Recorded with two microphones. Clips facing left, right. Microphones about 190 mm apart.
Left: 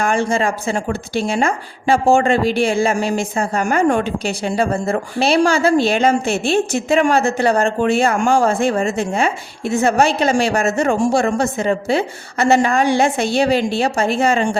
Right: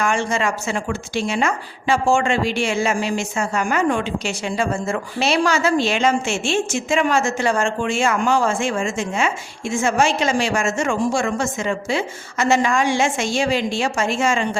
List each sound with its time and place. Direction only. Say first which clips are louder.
0.0 s speech: left 3 dB; 35° left (ahead or behind)